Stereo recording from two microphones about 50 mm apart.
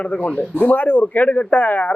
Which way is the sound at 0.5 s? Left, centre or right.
Left.